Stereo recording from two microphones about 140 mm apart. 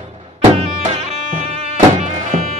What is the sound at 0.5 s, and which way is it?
Music, 50° right (ahead or behind).